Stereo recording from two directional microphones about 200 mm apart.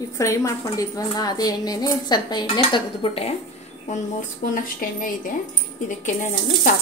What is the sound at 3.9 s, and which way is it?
Speech, 40° left (ahead or behind).